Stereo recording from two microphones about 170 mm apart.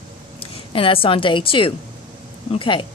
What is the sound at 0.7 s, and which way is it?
Speech, 30° left (ahead or behind).